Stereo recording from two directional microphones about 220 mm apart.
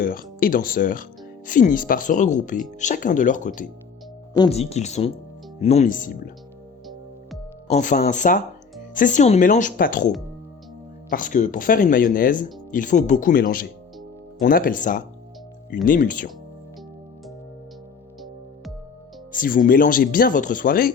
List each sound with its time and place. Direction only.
0.0 s speech: 40° left (ahead or behind)
7.7 s speech: 35° left (ahead or behind)
11.1 s speech: 40° left (ahead or behind)
19.3 s speech: 40° left (ahead or behind)